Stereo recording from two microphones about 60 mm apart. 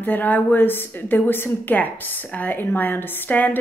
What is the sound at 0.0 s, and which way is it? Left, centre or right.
A woman's voice, left.